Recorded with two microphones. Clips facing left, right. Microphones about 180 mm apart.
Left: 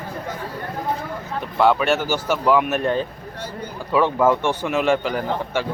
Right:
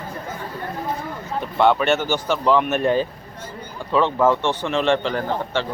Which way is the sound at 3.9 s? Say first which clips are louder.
Even; 10° left (ahead or behind).